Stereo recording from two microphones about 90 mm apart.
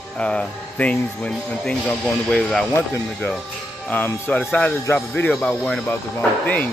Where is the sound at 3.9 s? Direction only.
25° left (ahead or behind).